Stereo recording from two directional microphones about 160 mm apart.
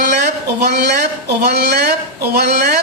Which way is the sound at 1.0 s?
85° right.